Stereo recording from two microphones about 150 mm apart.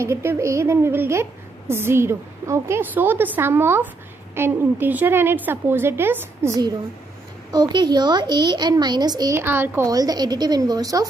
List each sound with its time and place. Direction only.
0.0 s a woman's voice: 15° right (ahead or behind)
9.4 s a woman's voice: 15° right (ahead or behind)